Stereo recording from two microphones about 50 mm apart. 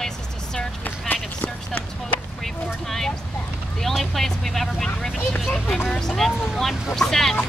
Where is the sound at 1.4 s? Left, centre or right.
Left.